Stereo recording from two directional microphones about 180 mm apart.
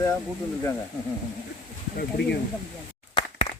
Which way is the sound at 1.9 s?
65° left (ahead or behind).